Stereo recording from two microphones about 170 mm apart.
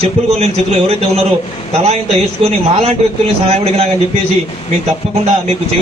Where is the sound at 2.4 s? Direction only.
35° right (ahead or behind).